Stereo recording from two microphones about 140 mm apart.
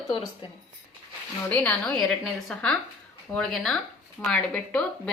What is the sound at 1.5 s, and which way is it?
Speech, 10° left (ahead or behind).